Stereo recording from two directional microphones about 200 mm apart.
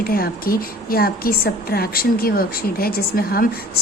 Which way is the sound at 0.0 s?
50° left (ahead or behind).